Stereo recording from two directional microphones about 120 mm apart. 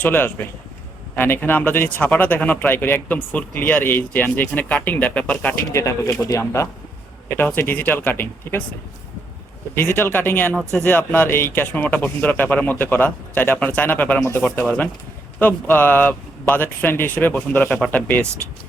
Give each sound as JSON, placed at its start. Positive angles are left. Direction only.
{"t": 0.0, "sound": "speech", "side_deg": 15}
{"t": 5.7, "sound": "speech", "side_deg": 25}
{"t": 9.7, "sound": "speech", "side_deg": 20}